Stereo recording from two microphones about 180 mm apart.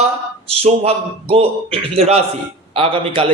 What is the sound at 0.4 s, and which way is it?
A man's voice, 35° right (ahead or behind).